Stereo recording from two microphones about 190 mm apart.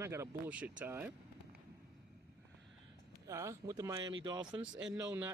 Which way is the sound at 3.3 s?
15° right (ahead or behind).